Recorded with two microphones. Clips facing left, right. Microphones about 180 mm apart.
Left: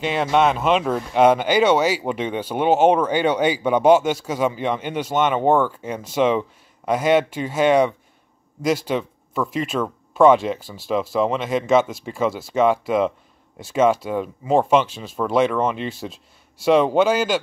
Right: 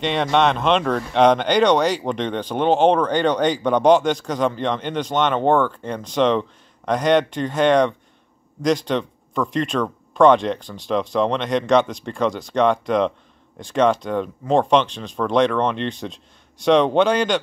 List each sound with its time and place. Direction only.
0.0 s speech: 5° left (ahead or behind)